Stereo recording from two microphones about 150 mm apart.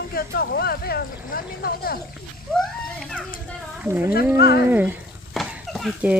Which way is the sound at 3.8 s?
10° right (ahead or behind).